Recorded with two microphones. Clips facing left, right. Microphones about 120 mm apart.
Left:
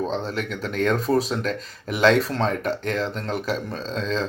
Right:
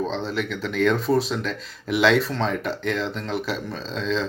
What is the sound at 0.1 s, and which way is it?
Speech, 45° left (ahead or behind).